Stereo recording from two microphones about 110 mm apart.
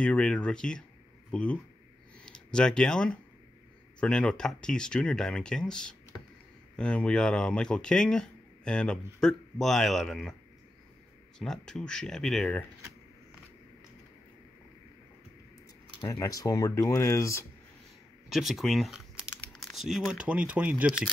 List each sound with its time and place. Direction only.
0.0 s speech: 10° left (ahead or behind)
11.3 s speech: 5° left (ahead or behind)
16.1 s speech: 30° left (ahead or behind)
18.3 s typing: centre (ahead or behind)
20.1 s speech: 10° right (ahead or behind)